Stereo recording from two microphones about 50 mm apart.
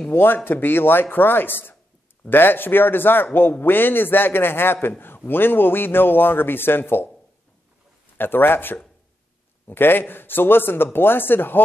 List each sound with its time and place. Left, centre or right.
0.0 s speech: left
8.2 s speech: left